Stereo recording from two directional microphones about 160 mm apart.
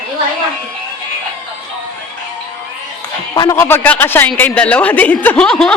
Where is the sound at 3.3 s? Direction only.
25° left (ahead or behind); by 5.7 s 5° left (ahead or behind).